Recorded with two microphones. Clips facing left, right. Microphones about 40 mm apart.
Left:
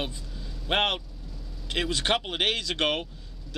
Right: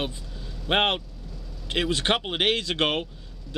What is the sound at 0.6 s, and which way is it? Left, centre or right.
A man's voice, right.